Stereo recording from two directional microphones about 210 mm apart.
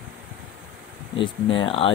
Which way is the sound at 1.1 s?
25° left (ahead or behind).